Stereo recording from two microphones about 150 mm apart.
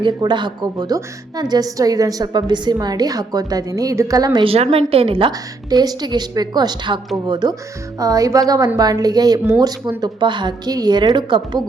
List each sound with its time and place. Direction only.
0.0 s a woman's voice: 30° right (ahead or behind)
4.4 s a woman's voice: 40° right (ahead or behind)
5.7 s a woman's voice: 25° right (ahead or behind)